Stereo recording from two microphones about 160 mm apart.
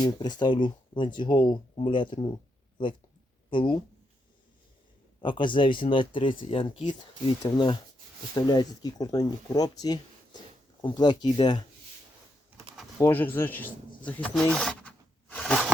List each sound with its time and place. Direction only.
0.0 s speech: 25° left (ahead or behind)
3.5 s speech: 30° left (ahead or behind)
5.2 s speech: 30° left (ahead or behind)
13.0 s speech: 15° left (ahead or behind)
13.3 s a sound: 10° left (ahead or behind)